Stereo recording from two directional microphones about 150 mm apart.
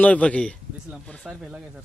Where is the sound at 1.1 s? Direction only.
5° right (ahead or behind).